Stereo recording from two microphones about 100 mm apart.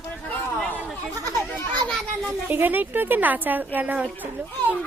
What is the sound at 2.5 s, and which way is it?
A woman's voice, 20° right (ahead or behind).